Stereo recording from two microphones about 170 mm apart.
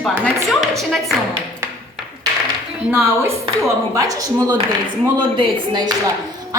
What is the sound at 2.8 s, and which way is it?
A woman's voice, 10° right (ahead or behind).